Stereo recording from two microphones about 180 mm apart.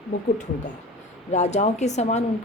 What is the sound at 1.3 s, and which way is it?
Speech, 40° left (ahead or behind).